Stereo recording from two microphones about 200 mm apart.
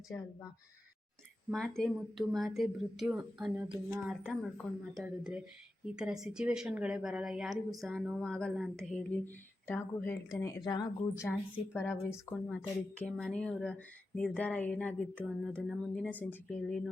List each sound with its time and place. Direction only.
1.5 s speech: centre (ahead or behind)